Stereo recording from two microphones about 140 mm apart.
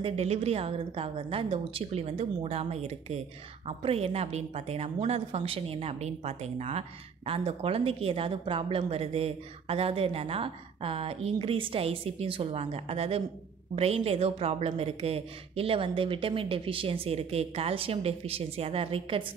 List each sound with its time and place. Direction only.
0.0 s a woman's voice: 45° right (ahead or behind)